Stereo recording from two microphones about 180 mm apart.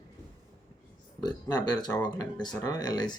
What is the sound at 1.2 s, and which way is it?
Speech, 20° left (ahead or behind).